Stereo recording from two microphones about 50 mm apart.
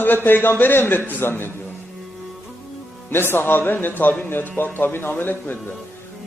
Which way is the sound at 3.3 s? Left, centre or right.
Left.